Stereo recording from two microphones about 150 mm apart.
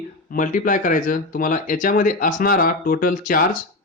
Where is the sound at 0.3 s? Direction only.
60° left (ahead or behind).